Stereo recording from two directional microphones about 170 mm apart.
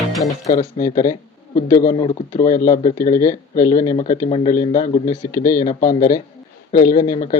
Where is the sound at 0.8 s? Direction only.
20° left (ahead or behind).